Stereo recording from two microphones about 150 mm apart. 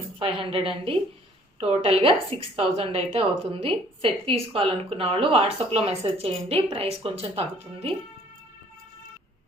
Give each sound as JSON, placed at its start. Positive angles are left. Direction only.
{"t": 0.2, "sound": "a woman's voice", "side_deg": -35}